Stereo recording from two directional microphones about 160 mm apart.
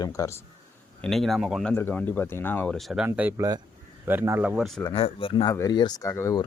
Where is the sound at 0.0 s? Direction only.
20° left (ahead or behind).